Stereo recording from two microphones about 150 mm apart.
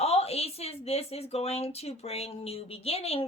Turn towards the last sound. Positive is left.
turn(degrees=40)  # may be behind; listen again after turning